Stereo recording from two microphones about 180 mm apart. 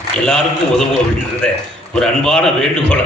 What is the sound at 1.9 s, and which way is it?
Speech, 5° left (ahead or behind).